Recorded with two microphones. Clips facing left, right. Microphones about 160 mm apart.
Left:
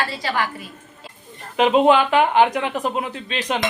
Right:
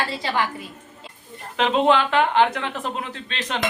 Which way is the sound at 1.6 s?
10° left (ahead or behind).